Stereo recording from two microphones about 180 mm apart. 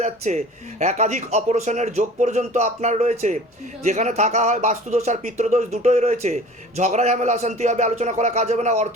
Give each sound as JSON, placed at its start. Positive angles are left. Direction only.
{"t": 0.0, "sound": "speech", "side_deg": -40}